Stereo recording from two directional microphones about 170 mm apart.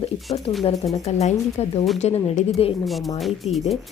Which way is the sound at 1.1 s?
40° left (ahead or behind).